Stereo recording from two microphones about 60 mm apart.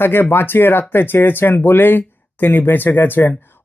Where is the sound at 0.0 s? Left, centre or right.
Left.